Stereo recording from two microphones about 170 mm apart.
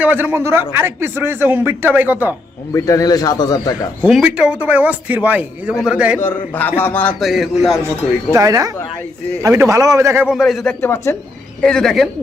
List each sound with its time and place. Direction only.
0.0 s a man's voice: 10° right (ahead or behind)
2.7 s speech: 20° left (ahead or behind)
4.0 s a man's voice: 5° right (ahead or behind)
6.1 s a man's voice: 10° left (ahead or behind)
7.2 s speech: centre (ahead or behind)
7.9 s a man's voice: 20° right (ahead or behind)
10.2 s speech: centre (ahead or behind)
10.8 s a man's voice: 15° left (ahead or behind)
11.6 s speech: 5° left (ahead or behind)